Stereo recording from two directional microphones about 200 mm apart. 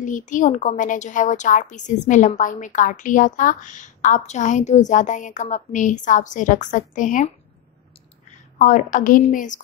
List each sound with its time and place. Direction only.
0.0 s a woman's voice: 40° left (ahead or behind)
8.5 s a woman's voice: 40° left (ahead or behind)